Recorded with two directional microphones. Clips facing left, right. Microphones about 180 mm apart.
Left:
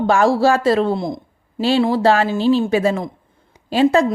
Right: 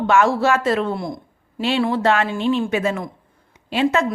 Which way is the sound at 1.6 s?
35° left (ahead or behind).